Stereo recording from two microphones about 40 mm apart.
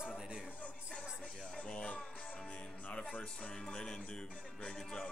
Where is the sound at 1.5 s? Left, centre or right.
Left.